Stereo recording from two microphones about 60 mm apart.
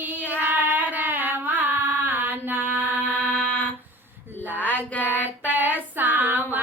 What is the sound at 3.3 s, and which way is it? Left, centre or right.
Fire alarm, left.